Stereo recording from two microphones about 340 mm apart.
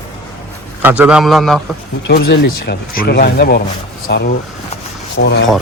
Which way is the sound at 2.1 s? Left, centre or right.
Left.